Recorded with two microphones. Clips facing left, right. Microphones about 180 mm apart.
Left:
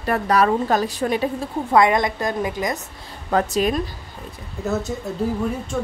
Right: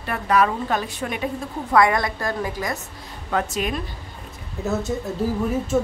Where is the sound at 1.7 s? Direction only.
20° left (ahead or behind).